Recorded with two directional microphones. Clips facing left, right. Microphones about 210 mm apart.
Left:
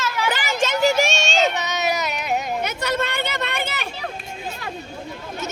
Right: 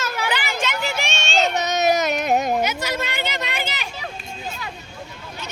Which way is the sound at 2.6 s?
60° left (ahead or behind).